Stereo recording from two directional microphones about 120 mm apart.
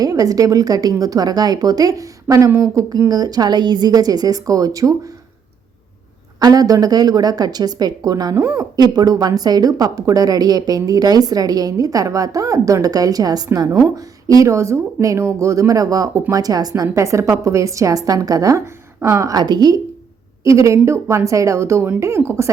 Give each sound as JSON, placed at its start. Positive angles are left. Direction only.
{"t": 0.0, "sound": "a woman's voice", "side_deg": -30}
{"t": 6.4, "sound": "a woman's voice", "side_deg": -30}